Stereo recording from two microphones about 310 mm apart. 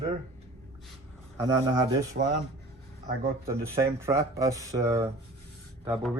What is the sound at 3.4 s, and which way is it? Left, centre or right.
Speech, centre.